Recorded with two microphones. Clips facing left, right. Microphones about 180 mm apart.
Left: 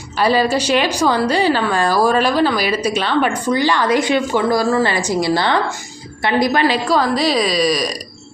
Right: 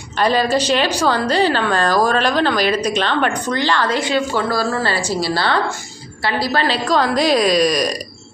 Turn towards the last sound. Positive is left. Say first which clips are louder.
# right 1 dB
turn(degrees=0)  # may be behind; listen again after turning